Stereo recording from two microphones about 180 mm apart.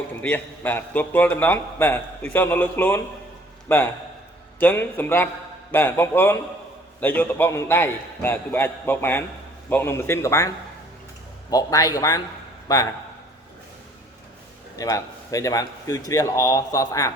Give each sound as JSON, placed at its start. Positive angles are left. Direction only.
{"t": 0.2, "sound": "a man's voice", "side_deg": 10}
{"t": 11.5, "sound": "a man's voice", "side_deg": 20}
{"t": 14.8, "sound": "speech", "side_deg": 20}